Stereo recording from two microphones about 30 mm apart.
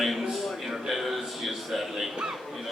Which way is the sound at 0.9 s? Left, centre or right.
Centre.